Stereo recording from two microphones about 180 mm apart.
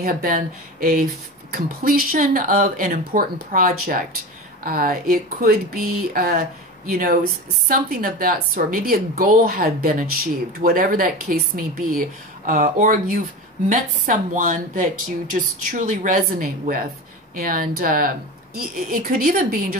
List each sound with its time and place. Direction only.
0.0 s a woman's voice: 50° right (ahead or behind)